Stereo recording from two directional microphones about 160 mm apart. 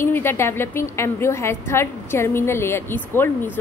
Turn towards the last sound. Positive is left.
turn(degrees=15)  # may be behind; listen again after turning